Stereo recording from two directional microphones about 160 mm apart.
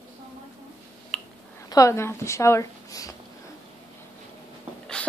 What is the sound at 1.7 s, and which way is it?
A woman's voice, 20° left (ahead or behind).